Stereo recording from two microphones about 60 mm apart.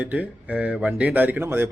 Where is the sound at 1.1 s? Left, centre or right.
Right.